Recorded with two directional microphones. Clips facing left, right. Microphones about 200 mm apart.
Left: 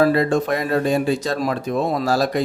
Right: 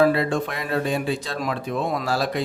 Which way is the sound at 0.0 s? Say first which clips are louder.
Left 3 dB; 45° left (ahead or behind).